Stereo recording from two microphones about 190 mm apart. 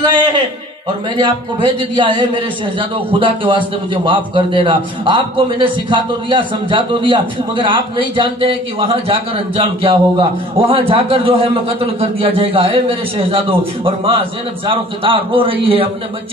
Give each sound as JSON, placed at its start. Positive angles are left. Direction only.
{"t": 1.1, "sound": "a man's voice", "side_deg": -25}